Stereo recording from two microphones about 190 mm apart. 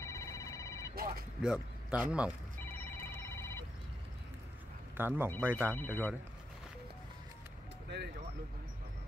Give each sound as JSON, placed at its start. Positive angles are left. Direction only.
{"t": 0.0, "sound": "a sound", "side_deg": 15}
{"t": 0.9, "sound": "speech", "side_deg": -50}
{"t": 1.4, "sound": "speech", "side_deg": -5}
{"t": 2.6, "sound": "a sound", "side_deg": 10}
{"t": 4.9, "sound": "speech", "side_deg": -10}
{"t": 5.7, "sound": "speech", "side_deg": 10}